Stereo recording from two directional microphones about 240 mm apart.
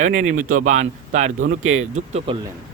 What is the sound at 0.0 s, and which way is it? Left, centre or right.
Speech, right.